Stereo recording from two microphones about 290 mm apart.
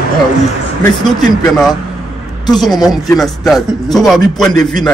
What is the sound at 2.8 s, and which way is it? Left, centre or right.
A man's voice, centre.